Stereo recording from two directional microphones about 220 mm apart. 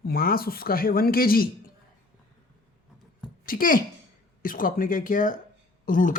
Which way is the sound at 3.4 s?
40° left (ahead or behind).